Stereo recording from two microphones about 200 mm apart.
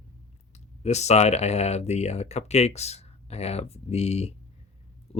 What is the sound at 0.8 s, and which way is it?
Speech, 35° left (ahead or behind).